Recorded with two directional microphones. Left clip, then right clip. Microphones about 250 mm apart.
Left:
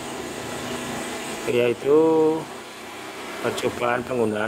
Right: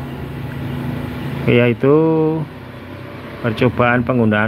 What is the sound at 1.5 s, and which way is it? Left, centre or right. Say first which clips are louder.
Speech: right 6 dB; centre.